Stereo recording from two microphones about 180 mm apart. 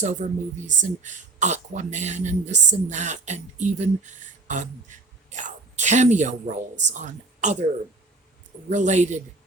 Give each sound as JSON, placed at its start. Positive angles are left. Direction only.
{"t": 0.0, "sound": "speech", "side_deg": -40}
{"t": 8.7, "sound": "speech", "side_deg": -40}